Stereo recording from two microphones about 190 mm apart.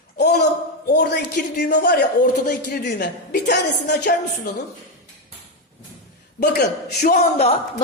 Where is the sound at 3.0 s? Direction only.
60° left (ahead or behind).